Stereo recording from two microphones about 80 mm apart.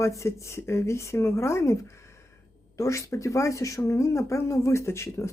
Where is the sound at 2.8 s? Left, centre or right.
Left.